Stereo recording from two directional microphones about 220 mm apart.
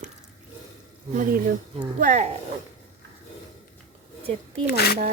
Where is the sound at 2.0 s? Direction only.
30° right (ahead or behind).